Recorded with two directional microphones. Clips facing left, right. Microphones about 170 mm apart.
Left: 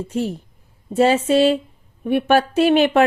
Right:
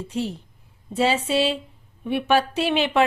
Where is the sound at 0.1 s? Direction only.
45° left (ahead or behind).